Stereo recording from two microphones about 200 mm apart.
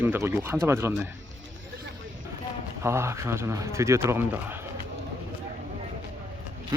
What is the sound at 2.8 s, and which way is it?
Speech, 15° right (ahead or behind).